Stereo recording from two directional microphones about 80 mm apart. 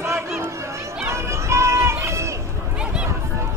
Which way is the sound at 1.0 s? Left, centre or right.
Right.